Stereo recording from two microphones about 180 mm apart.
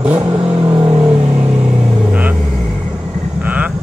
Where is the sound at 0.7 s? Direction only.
35° right (ahead or behind).